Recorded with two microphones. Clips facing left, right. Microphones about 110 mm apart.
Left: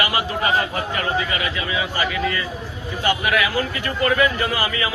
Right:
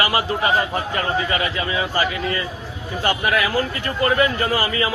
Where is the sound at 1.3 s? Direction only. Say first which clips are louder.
Right 2 dB; 35° right (ahead or behind).